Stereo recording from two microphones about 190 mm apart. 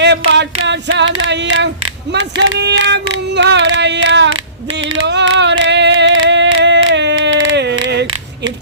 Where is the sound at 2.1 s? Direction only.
65° right (ahead or behind).